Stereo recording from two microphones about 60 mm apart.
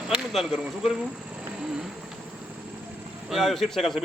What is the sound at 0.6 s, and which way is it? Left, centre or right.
Speech, centre.